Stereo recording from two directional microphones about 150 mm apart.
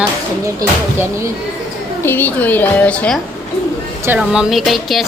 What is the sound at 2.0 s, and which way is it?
A woman's voice, 10° left (ahead or behind).